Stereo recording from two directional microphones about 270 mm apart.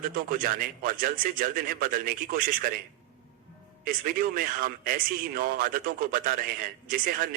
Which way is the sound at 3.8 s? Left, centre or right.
Right.